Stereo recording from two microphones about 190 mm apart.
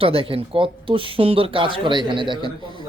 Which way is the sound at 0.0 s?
30° right (ahead or behind).